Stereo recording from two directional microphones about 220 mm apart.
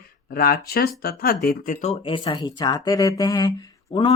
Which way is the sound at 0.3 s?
40° left (ahead or behind).